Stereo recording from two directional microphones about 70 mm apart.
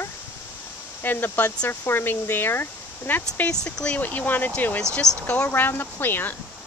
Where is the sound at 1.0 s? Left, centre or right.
Left.